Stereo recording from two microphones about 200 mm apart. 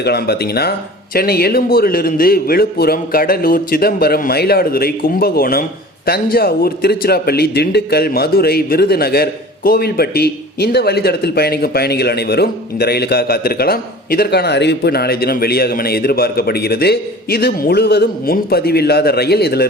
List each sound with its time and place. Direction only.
0.0 s a man's voice: 55° left (ahead or behind)